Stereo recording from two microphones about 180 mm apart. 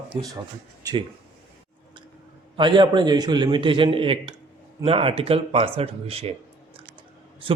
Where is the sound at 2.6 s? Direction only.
25° right (ahead or behind).